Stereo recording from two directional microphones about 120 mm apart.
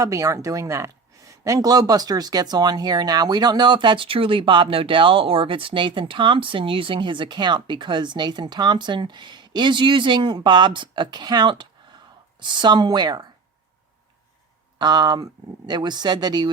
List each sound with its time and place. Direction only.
0.0 s speech: 25° right (ahead or behind)
14.8 s speech: 35° right (ahead or behind)